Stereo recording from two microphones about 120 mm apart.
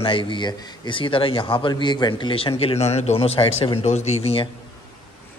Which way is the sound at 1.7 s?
40° left (ahead or behind).